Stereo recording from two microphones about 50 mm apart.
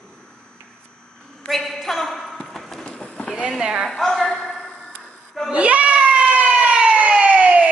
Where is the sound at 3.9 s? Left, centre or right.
Centre.